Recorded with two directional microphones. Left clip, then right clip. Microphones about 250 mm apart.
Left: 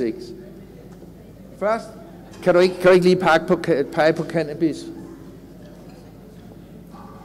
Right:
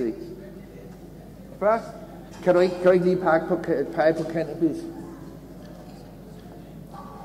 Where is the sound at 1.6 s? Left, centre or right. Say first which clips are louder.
Even; centre.